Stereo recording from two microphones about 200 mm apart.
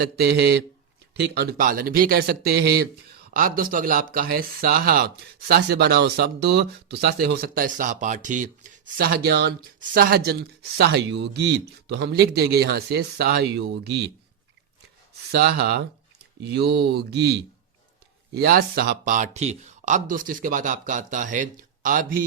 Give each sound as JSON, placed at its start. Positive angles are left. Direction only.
{"t": 0.0, "sound": "speech", "side_deg": -55}
{"t": 15.3, "sound": "speech", "side_deg": -55}